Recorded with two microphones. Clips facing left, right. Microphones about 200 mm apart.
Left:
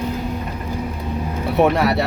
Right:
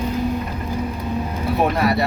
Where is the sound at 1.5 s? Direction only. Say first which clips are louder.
Left 3 dB; 75° left (ahead or behind).